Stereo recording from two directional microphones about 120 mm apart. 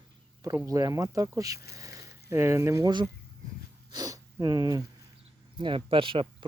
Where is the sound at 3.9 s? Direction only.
30° right (ahead or behind).